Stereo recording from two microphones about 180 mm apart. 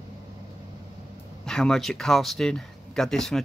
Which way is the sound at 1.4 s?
5° left (ahead or behind).